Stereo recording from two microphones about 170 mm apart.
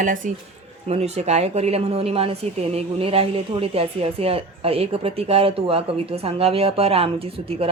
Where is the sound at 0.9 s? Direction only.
40° right (ahead or behind).